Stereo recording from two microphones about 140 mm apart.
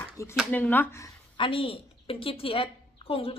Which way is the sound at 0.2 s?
20° left (ahead or behind).